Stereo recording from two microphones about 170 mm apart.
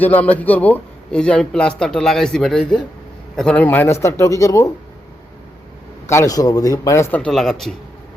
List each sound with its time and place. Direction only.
0.0 s a man's voice: 10° left (ahead or behind)
6.1 s speech: 20° left (ahead or behind); by 7.5 s centre (ahead or behind)